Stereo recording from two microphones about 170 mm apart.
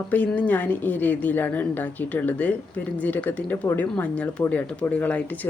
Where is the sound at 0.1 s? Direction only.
10° left (ahead or behind).